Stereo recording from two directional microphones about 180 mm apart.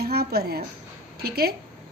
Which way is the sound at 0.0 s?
60° right (ahead or behind).